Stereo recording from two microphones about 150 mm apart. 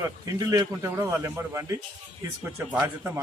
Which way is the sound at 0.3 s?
25° right (ahead or behind).